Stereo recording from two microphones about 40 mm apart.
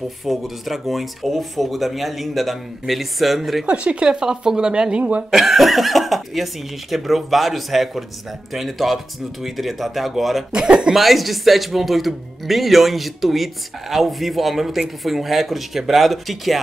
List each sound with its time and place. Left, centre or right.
0.2 s speech: centre
3.6 s speech: right
4.1 s speech: centre
5.3 s speech: centre
10.5 s speech: right
11.0 s speech: centre